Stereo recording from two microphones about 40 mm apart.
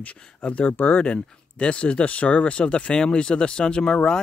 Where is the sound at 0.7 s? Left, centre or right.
Left.